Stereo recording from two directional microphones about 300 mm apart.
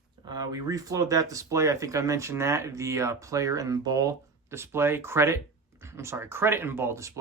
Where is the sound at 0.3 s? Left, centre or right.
Centre.